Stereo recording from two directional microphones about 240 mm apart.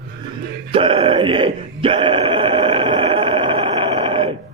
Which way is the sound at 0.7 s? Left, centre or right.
Right.